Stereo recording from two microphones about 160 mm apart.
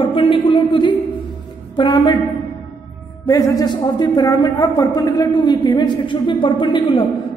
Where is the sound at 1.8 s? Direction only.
30° left (ahead or behind).